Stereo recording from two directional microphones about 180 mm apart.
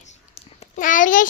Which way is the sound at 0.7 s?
45° left (ahead or behind).